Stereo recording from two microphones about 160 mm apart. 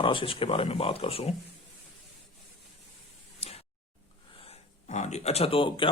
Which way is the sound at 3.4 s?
40° left (ahead or behind).